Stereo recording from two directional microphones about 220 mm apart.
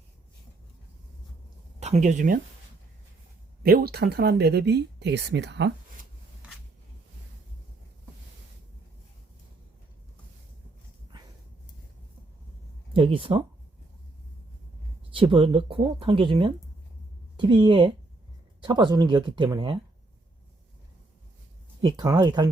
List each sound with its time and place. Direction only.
1.8 s speech: 30° right (ahead or behind)
3.6 s speech: 45° right (ahead or behind)
12.9 s speech: 25° right (ahead or behind)
15.1 s speech: 25° right (ahead or behind)
21.8 s speech: 20° right (ahead or behind)